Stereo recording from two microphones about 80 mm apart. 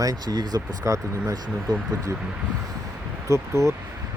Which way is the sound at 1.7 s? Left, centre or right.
Right.